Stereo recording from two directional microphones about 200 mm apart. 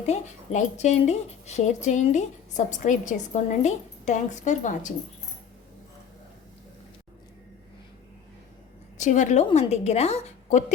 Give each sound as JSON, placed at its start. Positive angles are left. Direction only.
{"t": 0.0, "sound": "speech", "side_deg": 35}
{"t": 9.0, "sound": "a woman's voice", "side_deg": 40}